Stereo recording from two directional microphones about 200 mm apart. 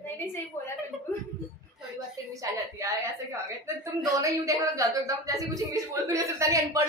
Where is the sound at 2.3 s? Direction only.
15° right (ahead or behind).